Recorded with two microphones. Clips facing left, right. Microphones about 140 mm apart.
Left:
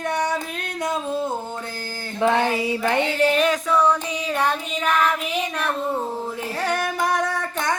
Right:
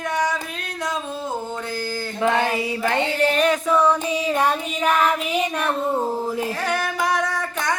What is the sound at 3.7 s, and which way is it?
Child singing, 10° right (ahead or behind).